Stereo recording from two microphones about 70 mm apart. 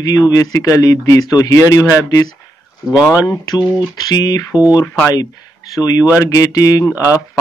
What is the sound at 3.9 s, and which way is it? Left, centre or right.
Speech, left.